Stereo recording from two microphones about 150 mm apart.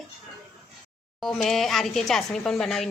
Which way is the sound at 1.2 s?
Centre (ahead or behind).